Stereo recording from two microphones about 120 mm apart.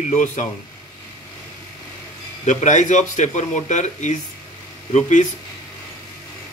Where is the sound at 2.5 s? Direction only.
85° left.